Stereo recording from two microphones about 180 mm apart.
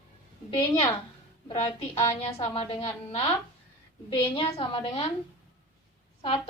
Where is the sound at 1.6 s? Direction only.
15° left (ahead or behind).